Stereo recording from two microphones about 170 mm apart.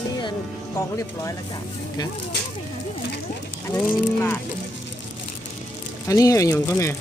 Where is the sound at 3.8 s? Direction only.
15° left (ahead or behind).